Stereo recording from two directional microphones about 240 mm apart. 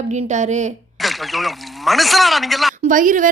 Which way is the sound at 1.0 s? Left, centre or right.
Centre.